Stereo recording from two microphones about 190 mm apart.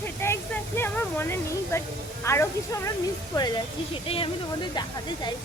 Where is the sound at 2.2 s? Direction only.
15° left (ahead or behind).